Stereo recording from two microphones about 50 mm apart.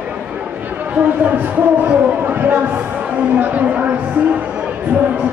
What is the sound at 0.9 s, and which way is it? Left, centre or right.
Speech, right.